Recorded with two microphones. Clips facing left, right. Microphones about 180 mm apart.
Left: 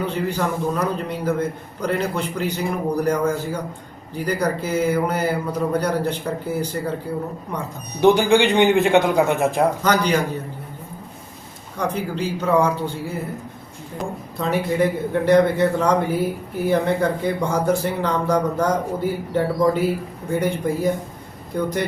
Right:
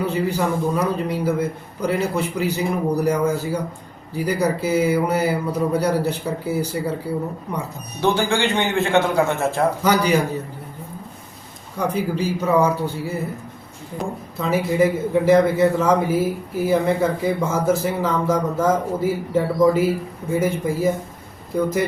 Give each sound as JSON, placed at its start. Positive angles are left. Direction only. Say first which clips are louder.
{"t": 0.0, "sound": "a man's voice", "louder": "right 2 dB", "side_deg": -5}
{"t": 8.0, "sound": "speech", "louder": "left 5 dB", "side_deg": 15}
{"t": 9.8, "sound": "a man's voice", "louder": "right 1 dB", "side_deg": -10}
{"t": 11.8, "sound": "a man's voice", "louder": "right 2 dB", "side_deg": -10}
{"t": 14.0, "sound": "a man's voice", "louder": "even", "side_deg": 0}